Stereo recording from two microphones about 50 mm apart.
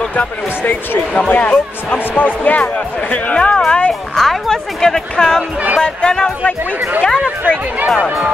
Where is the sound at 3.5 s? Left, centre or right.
Centre.